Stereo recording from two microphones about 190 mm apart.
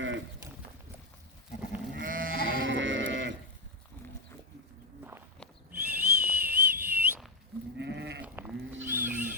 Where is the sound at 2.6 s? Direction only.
80° right.